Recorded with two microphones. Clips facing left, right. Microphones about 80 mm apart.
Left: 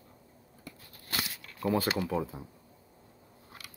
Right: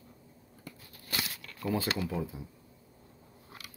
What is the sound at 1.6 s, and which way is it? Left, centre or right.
Speech, left.